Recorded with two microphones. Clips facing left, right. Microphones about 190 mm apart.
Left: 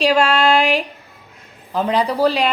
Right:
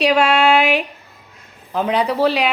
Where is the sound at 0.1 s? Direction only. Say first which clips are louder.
Right 1 dB; 5° right (ahead or behind).